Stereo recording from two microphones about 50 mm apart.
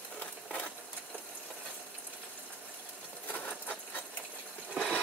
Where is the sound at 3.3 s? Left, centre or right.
Left.